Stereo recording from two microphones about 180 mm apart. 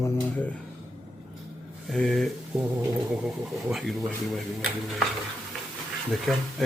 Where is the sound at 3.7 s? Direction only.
Centre (ahead or behind).